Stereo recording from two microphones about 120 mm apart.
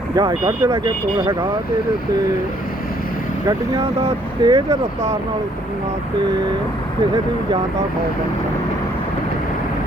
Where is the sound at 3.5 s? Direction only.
35° right (ahead or behind).